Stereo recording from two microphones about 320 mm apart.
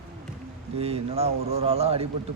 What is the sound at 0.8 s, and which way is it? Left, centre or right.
Speech, centre.